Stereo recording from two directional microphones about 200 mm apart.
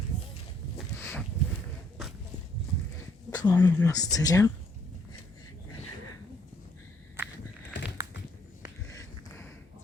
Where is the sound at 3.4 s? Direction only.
15° left (ahead or behind).